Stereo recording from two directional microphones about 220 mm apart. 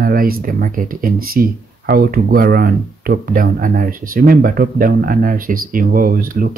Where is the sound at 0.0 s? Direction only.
40° right (ahead or behind).